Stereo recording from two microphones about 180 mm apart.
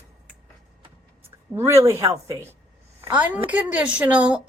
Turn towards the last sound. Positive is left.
turn(degrees=-5)  # may be behind; listen again after turning